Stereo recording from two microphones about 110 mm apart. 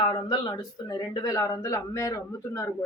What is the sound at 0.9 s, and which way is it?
Speech, 35° left (ahead or behind).